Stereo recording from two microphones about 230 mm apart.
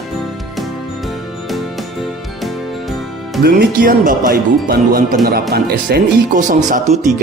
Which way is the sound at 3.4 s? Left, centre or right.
Right.